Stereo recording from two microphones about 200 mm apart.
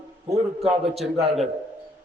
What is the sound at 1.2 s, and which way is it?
Speech, centre (ahead or behind).